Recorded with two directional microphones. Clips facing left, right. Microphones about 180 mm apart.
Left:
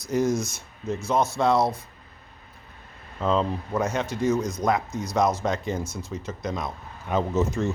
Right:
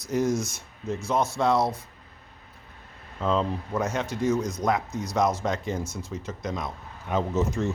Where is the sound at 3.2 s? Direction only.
30° left (ahead or behind).